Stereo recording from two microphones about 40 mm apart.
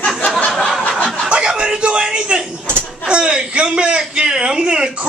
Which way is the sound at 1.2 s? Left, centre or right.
Right.